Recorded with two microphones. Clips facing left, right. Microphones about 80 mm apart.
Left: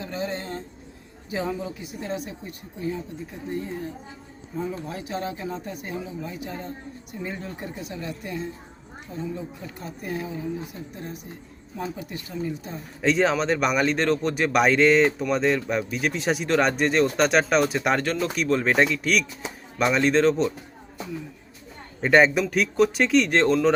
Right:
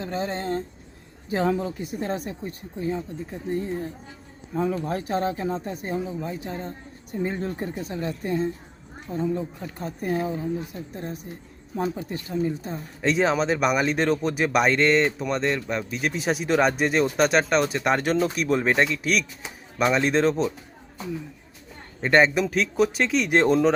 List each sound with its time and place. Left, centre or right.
0.0 s speech: right
4.5 s speech: right
12.8 s speech: centre
18.0 s speech: centre
18.3 s speech: centre
22.0 s speech: centre
23.3 s speech: centre